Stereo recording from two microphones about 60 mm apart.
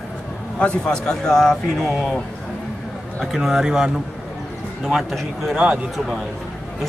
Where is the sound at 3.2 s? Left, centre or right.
Centre.